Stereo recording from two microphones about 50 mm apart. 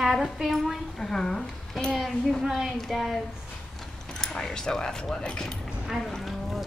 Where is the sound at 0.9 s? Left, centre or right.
Centre.